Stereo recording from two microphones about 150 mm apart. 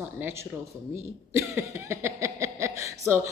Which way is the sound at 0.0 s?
15° right (ahead or behind).